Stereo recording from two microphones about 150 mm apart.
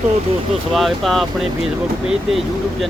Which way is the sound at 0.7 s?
Centre (ahead or behind).